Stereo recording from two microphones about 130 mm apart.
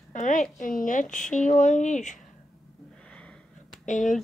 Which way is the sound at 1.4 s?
70° left (ahead or behind).